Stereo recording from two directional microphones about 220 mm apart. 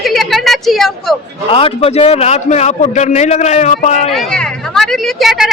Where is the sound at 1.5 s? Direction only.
25° left (ahead or behind).